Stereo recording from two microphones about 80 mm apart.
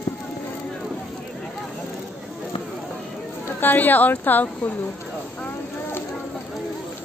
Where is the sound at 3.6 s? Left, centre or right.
Left.